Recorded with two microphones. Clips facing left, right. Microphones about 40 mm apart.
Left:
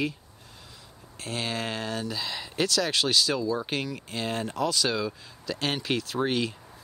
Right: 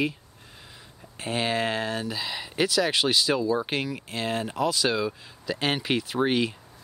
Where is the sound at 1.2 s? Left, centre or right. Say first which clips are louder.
Right 5 dB; centre.